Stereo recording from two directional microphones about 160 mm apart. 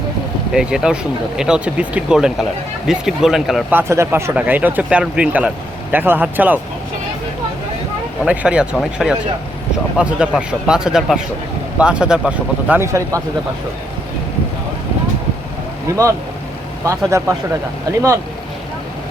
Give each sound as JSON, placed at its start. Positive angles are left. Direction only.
{"t": 0.5, "sound": "speech", "side_deg": -5}
{"t": 3.8, "sound": "speech", "side_deg": -15}
{"t": 8.2, "sound": "speech", "side_deg": -5}
{"t": 12.8, "sound": "speech", "side_deg": -20}
{"t": 15.9, "sound": "speech", "side_deg": -20}